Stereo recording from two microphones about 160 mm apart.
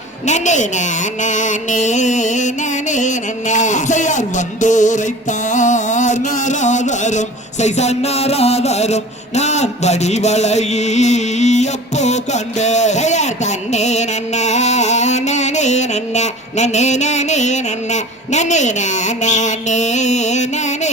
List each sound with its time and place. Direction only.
0.3 s mantra: 50° left (ahead or behind)